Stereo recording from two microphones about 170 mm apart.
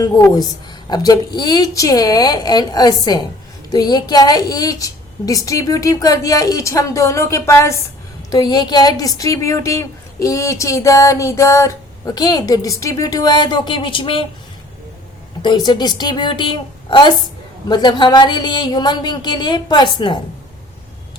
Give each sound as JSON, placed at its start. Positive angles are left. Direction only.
{"t": 0.0, "sound": "a woman's voice", "side_deg": 20}
{"t": 15.4, "sound": "a woman's voice", "side_deg": 25}